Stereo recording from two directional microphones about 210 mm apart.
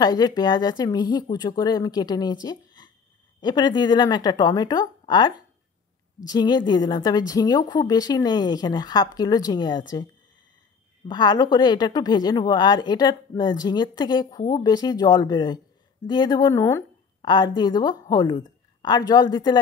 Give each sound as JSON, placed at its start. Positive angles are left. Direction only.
{"t": 0.0, "sound": "a woman's voice", "side_deg": 20}
{"t": 2.4, "sound": "a sound", "side_deg": 20}
{"t": 3.3, "sound": "a woman's voice", "side_deg": 20}
{"t": 11.1, "sound": "a woman's voice", "side_deg": 20}